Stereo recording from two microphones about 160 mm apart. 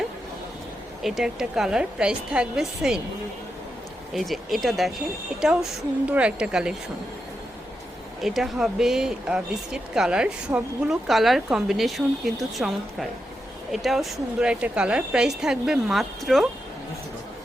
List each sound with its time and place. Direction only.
1.0 s speech: centre (ahead or behind)
4.1 s a woman's voice: centre (ahead or behind)
8.2 s speech: centre (ahead or behind)